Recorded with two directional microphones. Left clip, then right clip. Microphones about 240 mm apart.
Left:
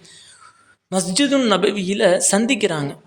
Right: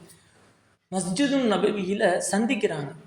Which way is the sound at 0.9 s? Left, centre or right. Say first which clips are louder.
Left 7 dB; left.